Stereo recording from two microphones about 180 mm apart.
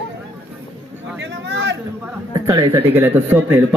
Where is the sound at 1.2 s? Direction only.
80° right.